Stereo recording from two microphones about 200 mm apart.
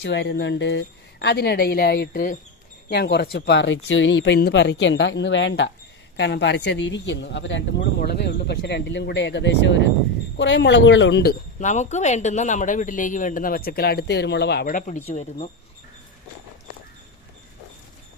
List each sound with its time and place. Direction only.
0.0 s speech: 60° left (ahead or behind)
11.6 s speech: 35° left (ahead or behind)